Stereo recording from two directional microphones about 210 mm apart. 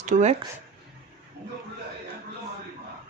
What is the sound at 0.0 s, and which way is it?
Speech, 35° right (ahead or behind).